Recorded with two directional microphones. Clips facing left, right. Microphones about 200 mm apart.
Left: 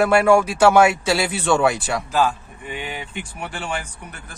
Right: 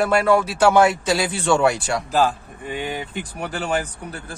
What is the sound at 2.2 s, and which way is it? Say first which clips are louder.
Speech: even; 40° right (ahead or behind).